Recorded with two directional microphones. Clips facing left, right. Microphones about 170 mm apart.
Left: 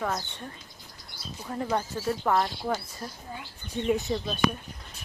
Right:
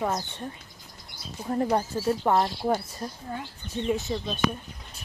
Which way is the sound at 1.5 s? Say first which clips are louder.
Right 4 dB; 35° right (ahead or behind).